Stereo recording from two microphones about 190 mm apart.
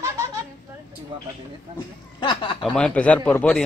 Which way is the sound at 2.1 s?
25° left (ahead or behind).